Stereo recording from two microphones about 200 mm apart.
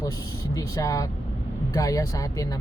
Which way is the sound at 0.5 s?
15° left (ahead or behind).